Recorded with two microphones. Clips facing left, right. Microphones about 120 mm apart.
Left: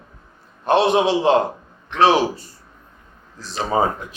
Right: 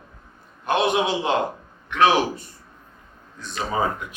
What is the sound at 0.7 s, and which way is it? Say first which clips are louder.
A man's voice: left 5 dB; 30° left (ahead or behind).